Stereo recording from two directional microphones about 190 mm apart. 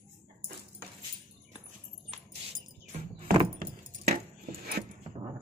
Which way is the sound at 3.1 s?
50° right (ahead or behind).